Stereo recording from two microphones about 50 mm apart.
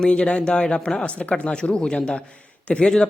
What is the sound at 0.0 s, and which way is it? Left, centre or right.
A man's voice, left.